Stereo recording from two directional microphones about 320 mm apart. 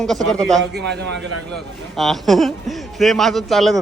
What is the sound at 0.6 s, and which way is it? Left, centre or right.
Speech, right.